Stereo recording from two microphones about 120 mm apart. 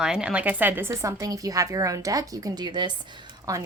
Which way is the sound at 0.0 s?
5° right (ahead or behind).